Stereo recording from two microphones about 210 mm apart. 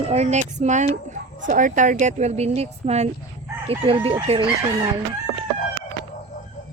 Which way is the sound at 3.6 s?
25° right (ahead or behind).